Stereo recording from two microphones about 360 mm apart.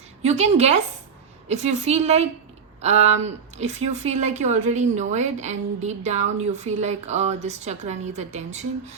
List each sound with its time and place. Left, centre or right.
0.2 s a woman's voice: centre